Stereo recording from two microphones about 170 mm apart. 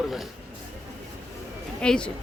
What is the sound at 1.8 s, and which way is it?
Speech, 5° left (ahead or behind).